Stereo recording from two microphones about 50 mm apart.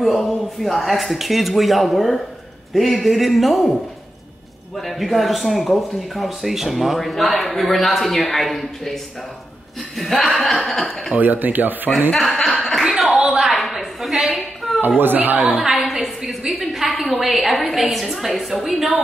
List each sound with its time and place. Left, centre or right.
0.0 s speech: centre
4.7 s speech: centre
10.7 s speech: centre
11.1 s speech: right
12.4 s chuckle: centre
12.8 s chuckle: centre
13.2 s a sound: centre
15.0 s speech: right
15.5 s a sound: centre
17.1 s speech: centre